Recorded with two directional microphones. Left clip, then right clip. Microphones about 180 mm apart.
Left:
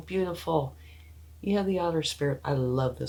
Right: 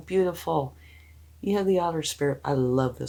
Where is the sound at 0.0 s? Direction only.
55° right (ahead or behind).